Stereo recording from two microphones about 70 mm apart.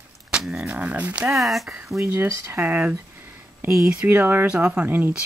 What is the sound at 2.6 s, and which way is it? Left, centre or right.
Speech, right.